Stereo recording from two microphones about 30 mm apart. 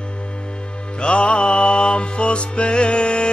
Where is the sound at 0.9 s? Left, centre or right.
Left.